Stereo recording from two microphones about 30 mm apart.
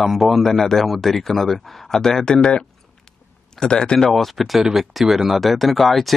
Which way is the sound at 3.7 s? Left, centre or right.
Left.